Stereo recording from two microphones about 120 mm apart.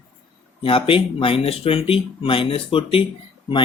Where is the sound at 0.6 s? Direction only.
50° left (ahead or behind).